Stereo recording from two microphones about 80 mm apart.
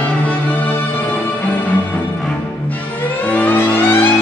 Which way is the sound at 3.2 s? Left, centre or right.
Left.